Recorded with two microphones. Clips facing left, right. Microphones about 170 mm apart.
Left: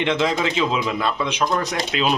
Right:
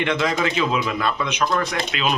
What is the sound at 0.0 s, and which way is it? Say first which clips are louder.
Speech: left 1 dB; 20° left (ahead or behind).